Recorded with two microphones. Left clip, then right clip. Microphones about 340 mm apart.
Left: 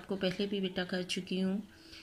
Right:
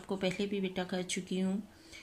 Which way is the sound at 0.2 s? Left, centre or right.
Right.